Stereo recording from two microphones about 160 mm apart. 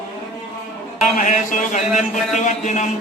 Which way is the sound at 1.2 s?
50° left (ahead or behind).